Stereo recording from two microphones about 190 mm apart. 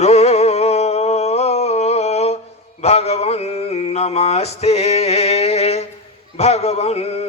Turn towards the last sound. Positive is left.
turn(degrees=35)  # may be behind; listen again after turning